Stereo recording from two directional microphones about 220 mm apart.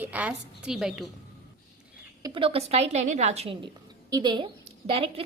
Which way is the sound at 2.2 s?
25° right (ahead or behind).